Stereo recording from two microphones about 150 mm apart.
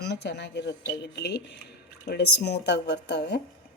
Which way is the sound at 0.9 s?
90° left.